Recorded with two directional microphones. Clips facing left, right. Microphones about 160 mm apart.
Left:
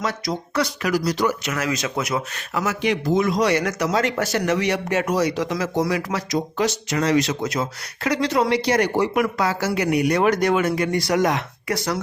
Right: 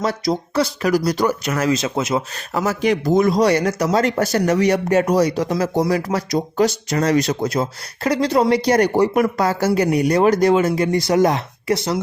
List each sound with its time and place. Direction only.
0.0 s speech: 35° right (ahead or behind)
2.5 s speech: 40° right (ahead or behind)